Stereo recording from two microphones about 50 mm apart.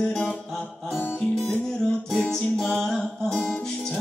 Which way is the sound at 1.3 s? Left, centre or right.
Centre.